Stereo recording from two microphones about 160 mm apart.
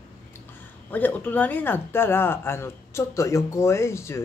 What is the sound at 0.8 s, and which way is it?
Speech, 10° left (ahead or behind).